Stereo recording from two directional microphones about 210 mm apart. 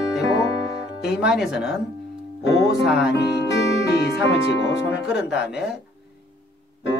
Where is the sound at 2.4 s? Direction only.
55° left (ahead or behind).